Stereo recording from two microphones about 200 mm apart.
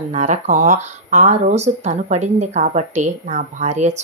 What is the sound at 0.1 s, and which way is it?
Speech, 35° right (ahead or behind).